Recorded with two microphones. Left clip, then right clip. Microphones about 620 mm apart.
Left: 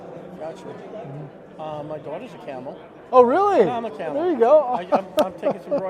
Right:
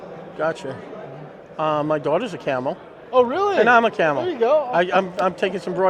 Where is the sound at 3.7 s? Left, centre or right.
Right.